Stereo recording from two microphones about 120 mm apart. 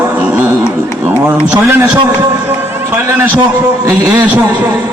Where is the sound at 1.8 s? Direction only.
20° right (ahead or behind).